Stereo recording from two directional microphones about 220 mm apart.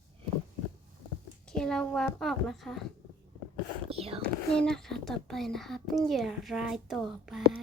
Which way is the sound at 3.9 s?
25° right (ahead or behind).